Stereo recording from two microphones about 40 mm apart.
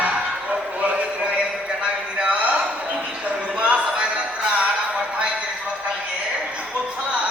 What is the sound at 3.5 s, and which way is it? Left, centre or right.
Music, right.